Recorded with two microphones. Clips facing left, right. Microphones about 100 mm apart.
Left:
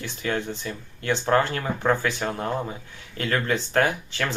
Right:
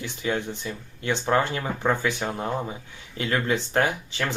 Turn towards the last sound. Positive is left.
turn(degrees=-20)  # may be behind; listen again after turning